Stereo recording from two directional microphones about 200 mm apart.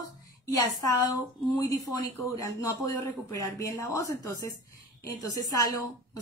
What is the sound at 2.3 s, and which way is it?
A woman's voice, 15° left (ahead or behind).